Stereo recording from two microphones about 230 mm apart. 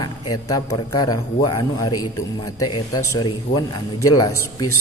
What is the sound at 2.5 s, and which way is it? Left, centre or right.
Speech, left.